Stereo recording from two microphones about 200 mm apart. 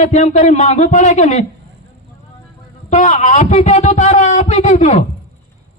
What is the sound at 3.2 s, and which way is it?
A man's voice, 35° left (ahead or behind).